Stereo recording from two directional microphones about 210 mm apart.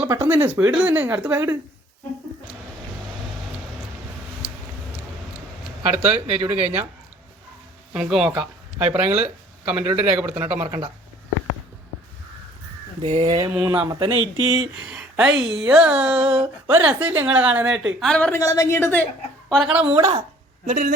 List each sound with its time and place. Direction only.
0.0 s speech: 10° right (ahead or behind)
6.2 s speech: 5° right (ahead or behind)
7.9 s a woman's voice: 5° right (ahead or behind)
8.9 s speech: 30° right (ahead or behind)
9.6 s a woman's voice: 5° right (ahead or behind)
13.0 s speech: 25° right (ahead or behind)
13.5 s speech: 10° right (ahead or behind)
14.8 s a woman's voice: 5° right (ahead or behind)
19.5 s a woman's voice: centre (ahead or behind)
19.8 s speech: 30° right (ahead or behind)
20.7 s a man's voice: 40° right (ahead or behind)